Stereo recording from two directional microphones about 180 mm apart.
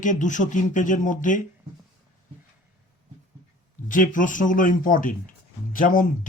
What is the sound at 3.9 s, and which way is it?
Speech, 45° left (ahead or behind).